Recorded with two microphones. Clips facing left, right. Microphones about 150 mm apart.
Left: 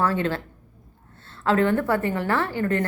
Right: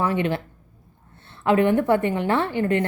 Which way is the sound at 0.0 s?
15° right (ahead or behind).